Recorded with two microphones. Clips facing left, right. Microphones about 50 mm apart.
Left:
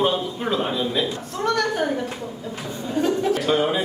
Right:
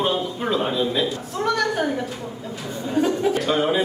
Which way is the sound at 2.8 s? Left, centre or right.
Centre.